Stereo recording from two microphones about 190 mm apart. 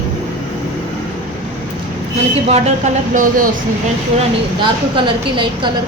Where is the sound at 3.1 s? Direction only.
45° right (ahead or behind).